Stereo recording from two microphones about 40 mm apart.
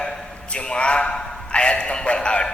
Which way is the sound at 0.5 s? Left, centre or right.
Left.